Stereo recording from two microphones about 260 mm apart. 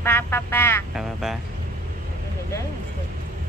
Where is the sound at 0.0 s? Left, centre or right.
Centre.